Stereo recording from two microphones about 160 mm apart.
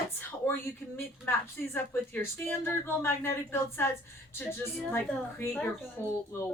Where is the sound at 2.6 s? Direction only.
15° left (ahead or behind).